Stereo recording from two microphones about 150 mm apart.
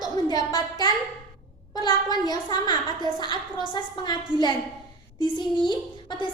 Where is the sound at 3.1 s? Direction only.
30° left (ahead or behind).